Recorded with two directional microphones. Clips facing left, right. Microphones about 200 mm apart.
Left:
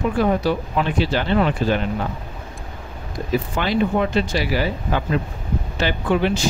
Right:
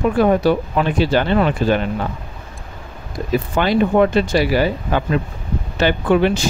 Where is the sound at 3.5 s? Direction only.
50° right (ahead or behind).